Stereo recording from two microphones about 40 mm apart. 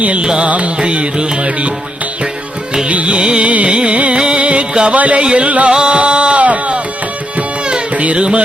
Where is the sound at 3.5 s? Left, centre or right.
Right.